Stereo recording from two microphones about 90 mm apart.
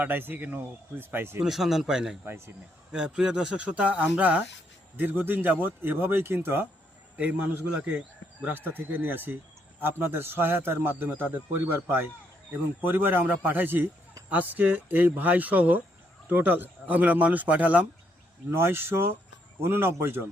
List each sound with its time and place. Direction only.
0.0 s a man's voice: 20° right (ahead or behind)
1.4 s speech: 5° right (ahead or behind)
2.2 s a man's voice: 30° right (ahead or behind)
2.9 s a man's voice: 10° right (ahead or behind); by 6.7 s 25° right (ahead or behind)
7.2 s a man's voice: 15° right (ahead or behind)
18.5 s a man's voice: 25° right (ahead or behind)